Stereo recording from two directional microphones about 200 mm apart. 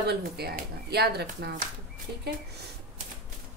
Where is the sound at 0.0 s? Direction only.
55° right (ahead or behind).